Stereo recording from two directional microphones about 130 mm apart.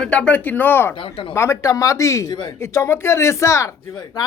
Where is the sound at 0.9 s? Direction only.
45° left (ahead or behind).